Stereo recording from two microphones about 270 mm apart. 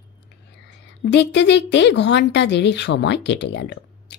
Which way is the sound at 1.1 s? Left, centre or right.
Left.